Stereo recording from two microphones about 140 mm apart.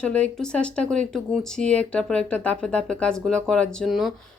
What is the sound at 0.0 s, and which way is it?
Speech, 5° left (ahead or behind).